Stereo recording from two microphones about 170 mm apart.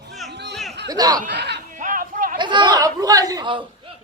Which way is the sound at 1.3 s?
80° right.